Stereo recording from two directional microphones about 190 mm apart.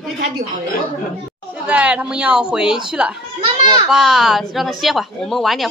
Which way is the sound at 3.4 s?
25° right (ahead or behind).